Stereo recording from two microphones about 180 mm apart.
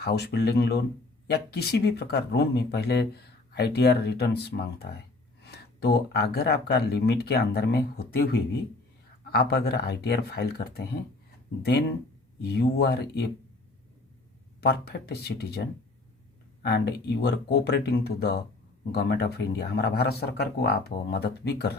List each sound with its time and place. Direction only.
0.0 s speech: 65° left (ahead or behind)
14.6 s speech: 60° left (ahead or behind)
16.6 s speech: 65° left (ahead or behind)